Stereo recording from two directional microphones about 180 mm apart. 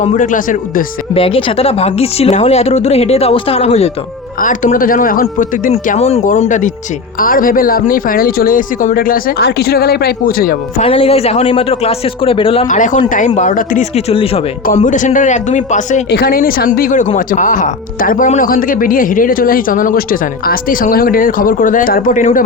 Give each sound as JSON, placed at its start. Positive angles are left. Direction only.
{"t": 0.0, "sound": "speech", "side_deg": 45}
{"t": 1.1, "sound": "speech", "side_deg": 30}
{"t": 4.4, "sound": "speech", "side_deg": 50}
{"t": 7.2, "sound": "speech", "side_deg": 50}
{"t": 10.8, "sound": "speech", "side_deg": 30}
{"t": 12.6, "sound": "speech", "side_deg": 45}
{"t": 14.8, "sound": "speech", "side_deg": 45}
{"t": 16.0, "sound": "speech", "side_deg": 60}